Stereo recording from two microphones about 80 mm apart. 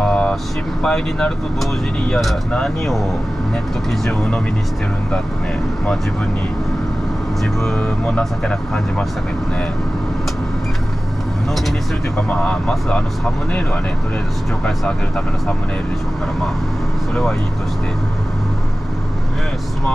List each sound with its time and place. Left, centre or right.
0.0 s vehicle: centre
0.8 s speech: centre
8.2 s speech: centre
12.2 s speech: centre
17.1 s speech: centre